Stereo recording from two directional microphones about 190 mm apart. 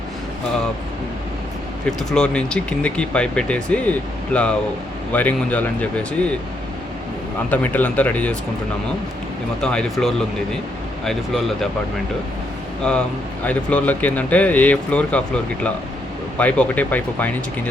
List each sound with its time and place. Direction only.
2.0 s speech: 5° left (ahead or behind)
7.5 s speech: 10° left (ahead or behind)
9.6 s speech: 5° left (ahead or behind)
12.9 s speech: 5° left (ahead or behind)